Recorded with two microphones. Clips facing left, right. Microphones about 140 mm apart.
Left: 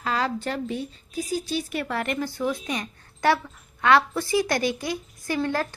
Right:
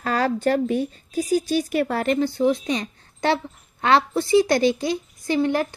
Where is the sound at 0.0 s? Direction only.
45° right (ahead or behind).